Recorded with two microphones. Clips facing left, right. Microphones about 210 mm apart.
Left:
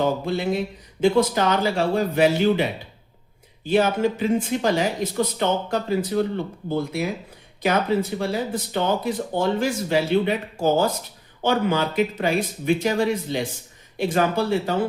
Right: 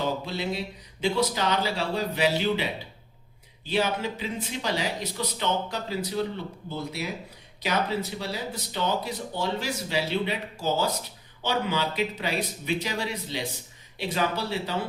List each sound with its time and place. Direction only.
0.0 s speech: 50° left (ahead or behind)